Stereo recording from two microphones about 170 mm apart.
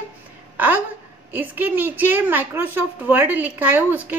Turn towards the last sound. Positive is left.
turn(degrees=-10)  # may be behind; listen again after turning